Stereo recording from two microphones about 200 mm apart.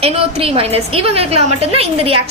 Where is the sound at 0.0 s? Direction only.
30° right (ahead or behind).